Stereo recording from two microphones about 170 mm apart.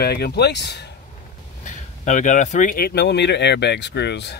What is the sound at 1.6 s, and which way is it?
Speech, 45° left (ahead or behind).